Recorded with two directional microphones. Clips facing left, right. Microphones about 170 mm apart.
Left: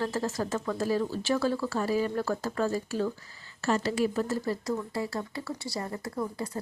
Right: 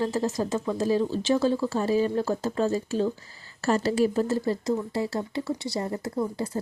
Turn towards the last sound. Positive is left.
turn(degrees=-25)  # may be behind; listen again after turning